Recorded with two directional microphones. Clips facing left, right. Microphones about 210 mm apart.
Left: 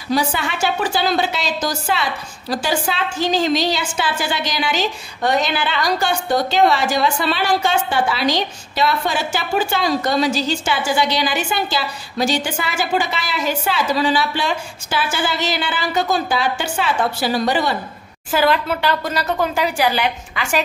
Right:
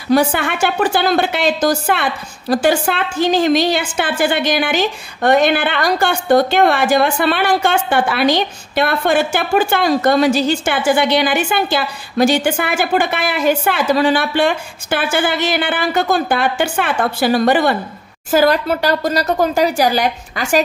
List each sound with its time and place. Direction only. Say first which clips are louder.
0.1 s a woman's voice: right 6 dB; 55° right (ahead or behind)
18.3 s a woman's voice: right 4 dB; 40° right (ahead or behind)